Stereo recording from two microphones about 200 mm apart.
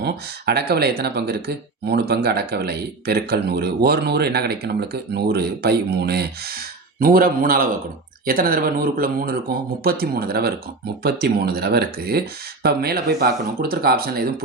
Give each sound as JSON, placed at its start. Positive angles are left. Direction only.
{"t": 0.0, "sound": "speech", "side_deg": -55}